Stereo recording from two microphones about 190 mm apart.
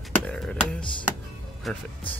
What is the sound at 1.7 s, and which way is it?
Speech, centre (ahead or behind).